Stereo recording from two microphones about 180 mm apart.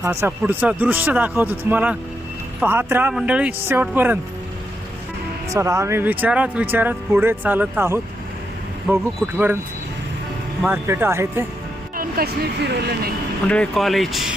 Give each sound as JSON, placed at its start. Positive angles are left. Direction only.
{"t": 0.0, "sound": "speech", "side_deg": -15}
{"t": 5.5, "sound": "speech", "side_deg": -15}
{"t": 10.6, "sound": "speech", "side_deg": -10}
{"t": 11.9, "sound": "speech", "side_deg": -55}
{"t": 13.5, "sound": "speech", "side_deg": 5}